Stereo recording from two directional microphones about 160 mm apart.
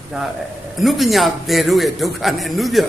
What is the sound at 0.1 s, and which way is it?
A man's voice, centre (ahead or behind).